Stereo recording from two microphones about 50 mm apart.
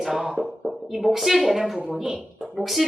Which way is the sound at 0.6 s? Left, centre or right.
Centre.